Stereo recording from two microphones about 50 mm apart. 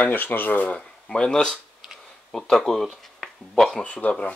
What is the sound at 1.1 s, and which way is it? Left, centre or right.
Speech, centre.